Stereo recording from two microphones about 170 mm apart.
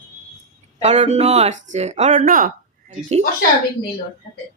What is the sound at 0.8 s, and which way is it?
Speech, 40° right (ahead or behind).